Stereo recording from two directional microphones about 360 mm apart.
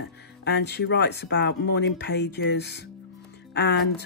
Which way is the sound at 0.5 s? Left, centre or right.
Left.